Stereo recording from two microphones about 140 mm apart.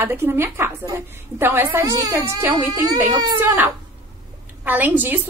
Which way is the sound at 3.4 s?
15° right (ahead or behind).